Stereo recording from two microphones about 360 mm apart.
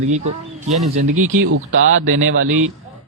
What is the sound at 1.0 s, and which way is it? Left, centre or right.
Speech, right.